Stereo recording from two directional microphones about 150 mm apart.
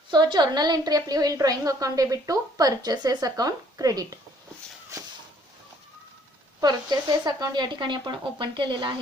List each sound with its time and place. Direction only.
0.1 s a woman's voice: 30° right (ahead or behind)
6.6 s a woman's voice: 25° right (ahead or behind)